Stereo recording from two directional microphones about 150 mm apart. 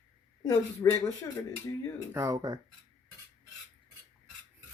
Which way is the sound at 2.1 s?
20° right (ahead or behind).